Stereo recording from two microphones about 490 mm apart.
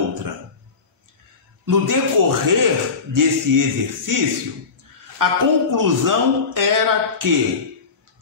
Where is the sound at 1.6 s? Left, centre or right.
Right.